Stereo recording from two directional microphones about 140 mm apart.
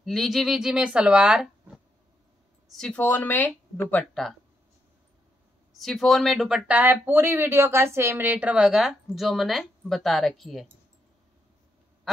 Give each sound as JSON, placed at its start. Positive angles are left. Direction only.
{"t": 0.0, "sound": "speech", "side_deg": 0}
{"t": 2.7, "sound": "speech", "side_deg": 5}
{"t": 5.8, "sound": "speech", "side_deg": 0}